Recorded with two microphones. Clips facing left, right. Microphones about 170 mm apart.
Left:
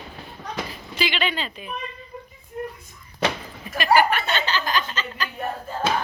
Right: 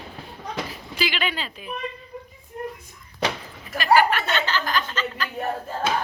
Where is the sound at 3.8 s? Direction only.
15° left (ahead or behind).